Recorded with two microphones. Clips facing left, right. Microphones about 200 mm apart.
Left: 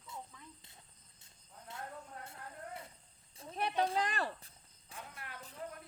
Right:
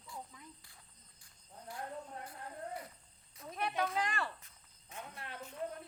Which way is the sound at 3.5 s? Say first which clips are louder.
Left 2 dB; 30° left (ahead or behind).